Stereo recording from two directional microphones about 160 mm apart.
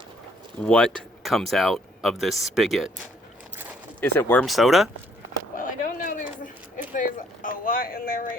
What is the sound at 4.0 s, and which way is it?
Speech, 15° left (ahead or behind).